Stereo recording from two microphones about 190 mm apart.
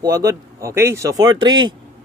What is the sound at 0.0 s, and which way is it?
A man's voice, 15° right (ahead or behind).